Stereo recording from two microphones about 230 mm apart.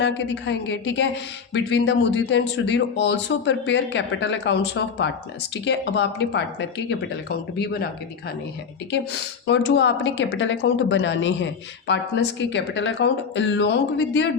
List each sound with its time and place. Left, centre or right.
0.0 s speech: left
9.5 s speech: left